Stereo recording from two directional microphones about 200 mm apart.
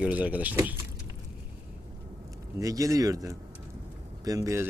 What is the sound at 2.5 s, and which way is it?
Speech, 15° right (ahead or behind).